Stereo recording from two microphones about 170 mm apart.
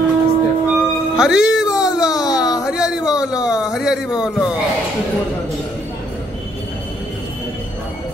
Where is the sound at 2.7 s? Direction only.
5° right (ahead or behind).